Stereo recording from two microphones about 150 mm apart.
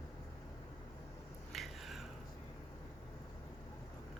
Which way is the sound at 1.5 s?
Centre (ahead or behind).